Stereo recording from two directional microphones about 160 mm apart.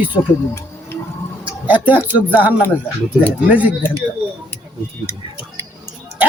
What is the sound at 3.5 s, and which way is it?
Speech, 10° right (ahead or behind).